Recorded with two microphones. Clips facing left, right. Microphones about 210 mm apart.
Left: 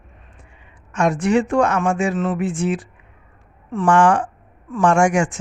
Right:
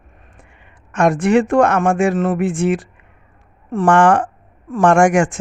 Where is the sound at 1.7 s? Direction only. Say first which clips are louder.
Right 4 dB; 55° right (ahead or behind).